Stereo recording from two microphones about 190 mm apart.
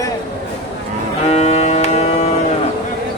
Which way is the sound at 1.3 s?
35° left (ahead or behind).